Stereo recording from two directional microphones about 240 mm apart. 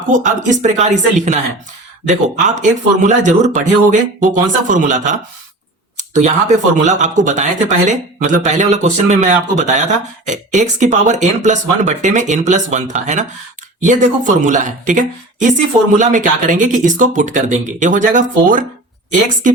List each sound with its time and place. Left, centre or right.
0.0 s a woman's voice: right